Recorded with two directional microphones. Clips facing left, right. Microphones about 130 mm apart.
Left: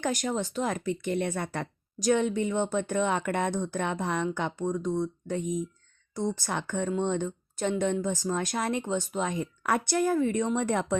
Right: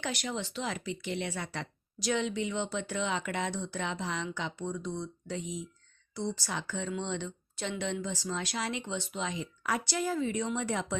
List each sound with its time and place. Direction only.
0.0 s speech: 45° left (ahead or behind)